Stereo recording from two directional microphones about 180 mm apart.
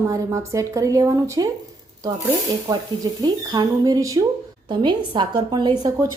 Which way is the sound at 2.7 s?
20° right (ahead or behind).